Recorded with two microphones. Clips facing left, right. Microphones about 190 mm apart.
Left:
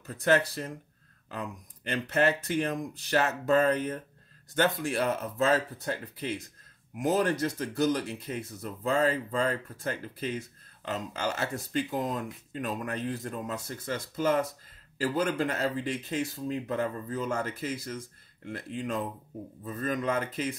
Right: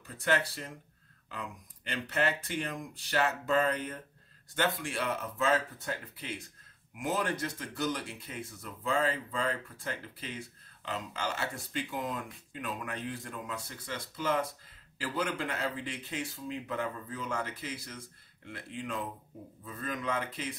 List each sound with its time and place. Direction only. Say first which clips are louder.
0.0 s speech: left 6 dB; 40° left (ahead or behind)